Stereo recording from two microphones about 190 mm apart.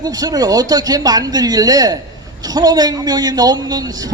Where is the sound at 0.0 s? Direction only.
20° right (ahead or behind).